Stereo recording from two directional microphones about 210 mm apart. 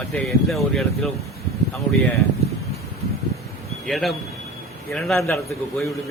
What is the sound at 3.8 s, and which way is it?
Speech, centre (ahead or behind).